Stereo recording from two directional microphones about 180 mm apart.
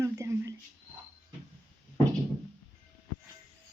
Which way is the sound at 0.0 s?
15° right (ahead or behind).